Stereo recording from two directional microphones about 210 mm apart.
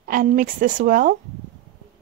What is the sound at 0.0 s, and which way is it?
Speech, 40° right (ahead or behind).